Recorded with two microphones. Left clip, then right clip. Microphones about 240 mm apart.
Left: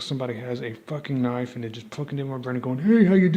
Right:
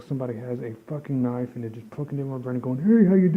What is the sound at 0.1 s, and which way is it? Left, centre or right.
Speech, centre.